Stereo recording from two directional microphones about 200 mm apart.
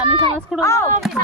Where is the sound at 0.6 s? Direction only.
15° left (ahead or behind).